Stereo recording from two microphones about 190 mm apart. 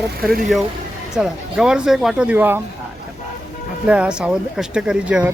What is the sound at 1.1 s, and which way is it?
Speech, 5° right (ahead or behind).